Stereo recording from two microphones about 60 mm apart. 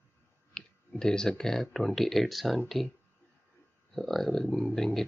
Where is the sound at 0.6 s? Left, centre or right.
Centre.